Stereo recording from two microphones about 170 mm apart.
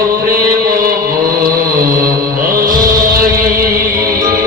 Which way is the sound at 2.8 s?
55° right (ahead or behind).